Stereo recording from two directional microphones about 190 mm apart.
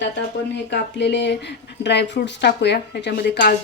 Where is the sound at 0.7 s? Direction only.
65° left (ahead or behind).